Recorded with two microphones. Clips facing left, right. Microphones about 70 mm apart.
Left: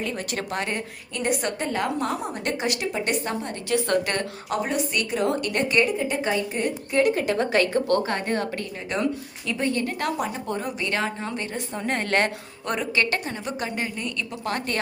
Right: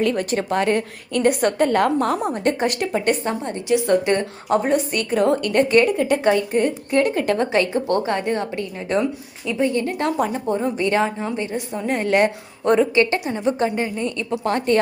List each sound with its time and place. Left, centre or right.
0.3 s a woman's voice: right
1.1 s a woman's voice: right
3.7 s a woman's voice: centre
4.4 s a woman's voice: right; by 9.8 s centre
9.8 s a woman's voice: right
10.4 s a woman's voice: right
11.7 s a woman's voice: centre
12.6 s a woman's voice: right